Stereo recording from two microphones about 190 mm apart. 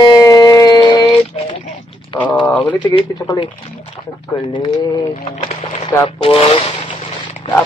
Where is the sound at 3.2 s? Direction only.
20° left (ahead or behind).